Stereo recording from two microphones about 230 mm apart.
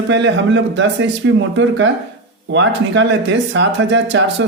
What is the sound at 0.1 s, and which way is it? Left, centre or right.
Speech, right.